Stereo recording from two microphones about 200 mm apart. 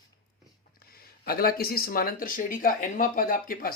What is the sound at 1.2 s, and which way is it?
Speech, 50° left (ahead or behind).